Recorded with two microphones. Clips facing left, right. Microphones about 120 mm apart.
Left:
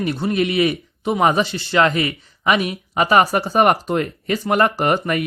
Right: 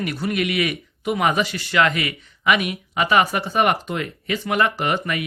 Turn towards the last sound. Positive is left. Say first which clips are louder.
# left 5 dB
turn(degrees=40)  # may be behind; listen again after turning